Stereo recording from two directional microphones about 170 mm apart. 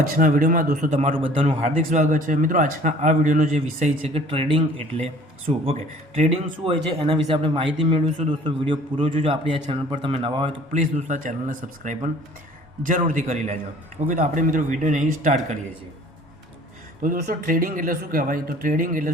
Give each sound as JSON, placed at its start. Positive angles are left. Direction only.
{"t": 0.2, "sound": "a man's voice", "side_deg": -50}
{"t": 0.9, "sound": "a man's voice", "side_deg": -40}
{"t": 5.5, "sound": "a man's voice", "side_deg": -40}
{"t": 10.7, "sound": "a man's voice", "side_deg": -45}
{"t": 17.0, "sound": "speech", "side_deg": -55}